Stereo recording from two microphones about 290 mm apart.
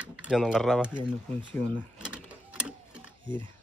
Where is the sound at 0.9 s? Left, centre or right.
Centre.